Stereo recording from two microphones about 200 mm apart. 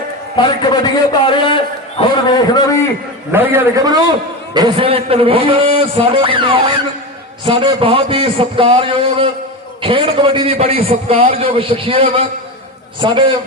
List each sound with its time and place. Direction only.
0.3 s a man's voice: 20° left (ahead or behind)
3.3 s a man's voice: 10° right (ahead or behind)